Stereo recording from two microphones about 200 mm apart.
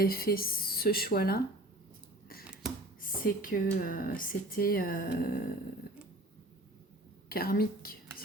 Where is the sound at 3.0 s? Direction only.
45° left (ahead or behind).